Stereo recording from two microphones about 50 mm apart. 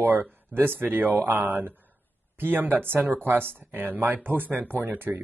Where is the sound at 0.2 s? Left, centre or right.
Right.